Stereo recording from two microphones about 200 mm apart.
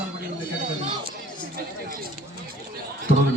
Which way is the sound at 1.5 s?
50° right (ahead or behind).